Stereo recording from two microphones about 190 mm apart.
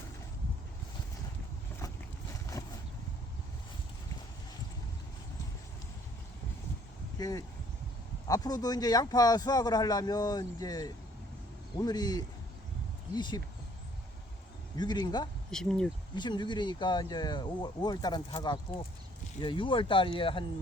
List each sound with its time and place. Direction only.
7.2 s speech: 20° left (ahead or behind)
14.8 s speech: 20° left (ahead or behind)
15.4 s speech: 5° left (ahead or behind)
16.1 s speech: 25° left (ahead or behind)